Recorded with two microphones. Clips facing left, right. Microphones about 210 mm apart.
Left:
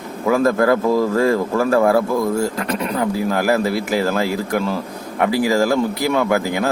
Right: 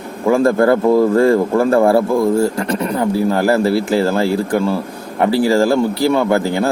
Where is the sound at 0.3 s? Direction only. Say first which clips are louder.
Right 3 dB; 30° right (ahead or behind).